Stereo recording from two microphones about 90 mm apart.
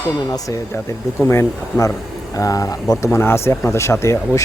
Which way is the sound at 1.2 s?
35° left (ahead or behind).